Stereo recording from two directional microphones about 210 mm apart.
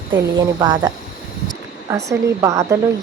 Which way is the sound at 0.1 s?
20° right (ahead or behind).